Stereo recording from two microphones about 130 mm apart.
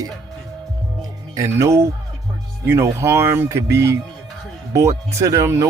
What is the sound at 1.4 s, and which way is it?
Speech, 20° right (ahead or behind).